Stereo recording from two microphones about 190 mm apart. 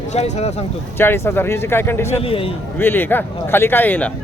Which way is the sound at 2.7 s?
10° left (ahead or behind).